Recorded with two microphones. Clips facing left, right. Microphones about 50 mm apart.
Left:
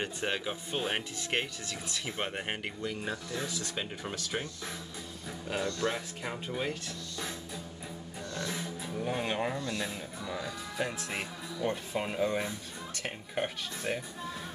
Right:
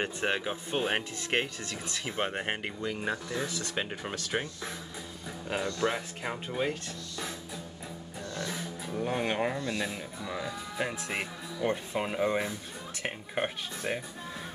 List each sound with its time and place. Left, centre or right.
0.0 s speech: right
1.7 s speech: right
2.0 s speech: centre
8.4 s music: centre
9.0 s speech: centre